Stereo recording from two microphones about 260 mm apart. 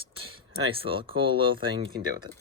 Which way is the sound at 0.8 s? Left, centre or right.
Right.